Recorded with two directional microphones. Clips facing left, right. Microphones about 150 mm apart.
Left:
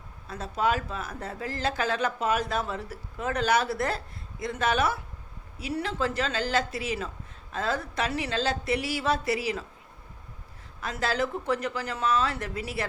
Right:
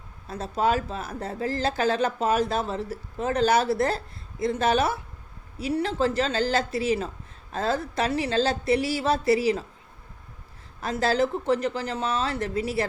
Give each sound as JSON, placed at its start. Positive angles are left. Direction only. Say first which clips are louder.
{"t": 0.3, "sound": "speech", "louder": "right 3 dB", "side_deg": -30}
{"t": 10.8, "sound": "a woman's voice", "louder": "right 5 dB", "side_deg": -35}